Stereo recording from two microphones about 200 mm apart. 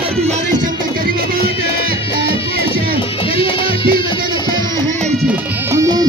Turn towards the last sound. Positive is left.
turn(degrees=-15)  # may be behind; listen again after turning